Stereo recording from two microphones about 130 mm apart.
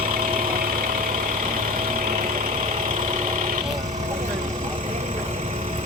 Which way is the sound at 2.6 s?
75° right (ahead or behind).